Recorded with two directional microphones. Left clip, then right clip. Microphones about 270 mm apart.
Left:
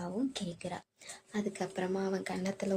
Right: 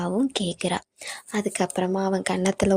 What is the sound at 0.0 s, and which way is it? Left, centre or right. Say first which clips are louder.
A woman's voice: right 12 dB; right.